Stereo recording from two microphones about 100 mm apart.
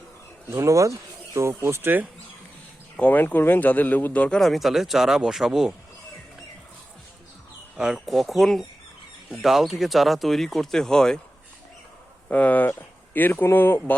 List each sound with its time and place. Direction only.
0.4 s speech: 30° right (ahead or behind)
3.0 s speech: 15° left (ahead or behind)
4.4 s speech: centre (ahead or behind)
7.8 s speech: 5° right (ahead or behind)
12.3 s speech: 15° left (ahead or behind)